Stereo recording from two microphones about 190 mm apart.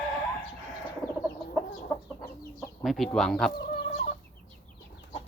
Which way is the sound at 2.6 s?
Centre (ahead or behind).